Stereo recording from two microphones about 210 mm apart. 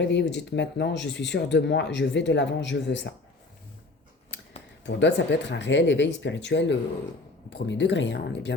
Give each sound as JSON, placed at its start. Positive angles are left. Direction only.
{"t": 0.0, "sound": "speech", "side_deg": 55}
{"t": 4.9, "sound": "speech", "side_deg": 55}